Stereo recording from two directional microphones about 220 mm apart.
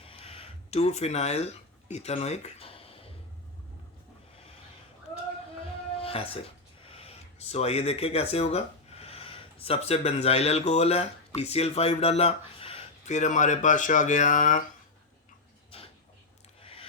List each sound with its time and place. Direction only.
0.0 s a sound: 25° left (ahead or behind)
6.0 s music: 25° left (ahead or behind)
6.8 s speech: 25° left (ahead or behind)